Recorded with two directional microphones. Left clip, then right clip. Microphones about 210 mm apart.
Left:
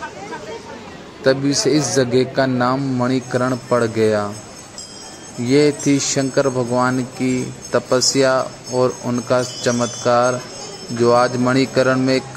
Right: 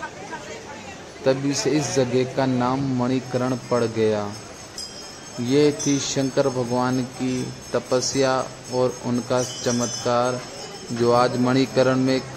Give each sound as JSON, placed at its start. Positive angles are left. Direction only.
{"t": 1.2, "sound": "speech", "side_deg": 15}
{"t": 5.4, "sound": "speech", "side_deg": 15}